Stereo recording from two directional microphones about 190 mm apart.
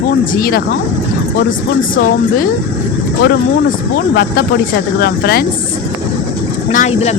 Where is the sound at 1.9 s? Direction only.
45° left (ahead or behind).